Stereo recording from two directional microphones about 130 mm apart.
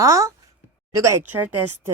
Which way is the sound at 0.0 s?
25° right (ahead or behind).